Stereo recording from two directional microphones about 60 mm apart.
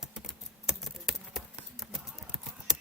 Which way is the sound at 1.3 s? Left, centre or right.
Centre.